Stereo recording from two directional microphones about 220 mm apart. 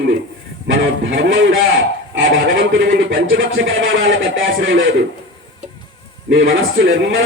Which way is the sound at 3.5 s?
60° right (ahead or behind).